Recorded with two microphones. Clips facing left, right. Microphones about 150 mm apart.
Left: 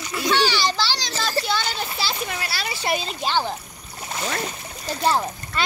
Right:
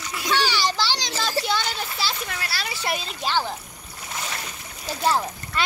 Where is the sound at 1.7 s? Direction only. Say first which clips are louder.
Left 2 dB; 25° left (ahead or behind).